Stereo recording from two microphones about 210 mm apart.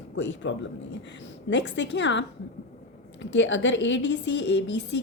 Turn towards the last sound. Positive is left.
turn(degrees=55)  # may be behind; listen again after turning